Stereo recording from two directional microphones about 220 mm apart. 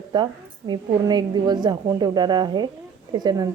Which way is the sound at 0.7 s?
20° right (ahead or behind).